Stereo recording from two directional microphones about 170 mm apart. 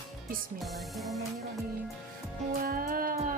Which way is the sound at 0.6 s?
Centre (ahead or behind).